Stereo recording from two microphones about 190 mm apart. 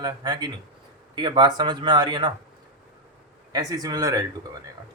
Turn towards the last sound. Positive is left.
turn(degrees=-20)  # may be behind; listen again after turning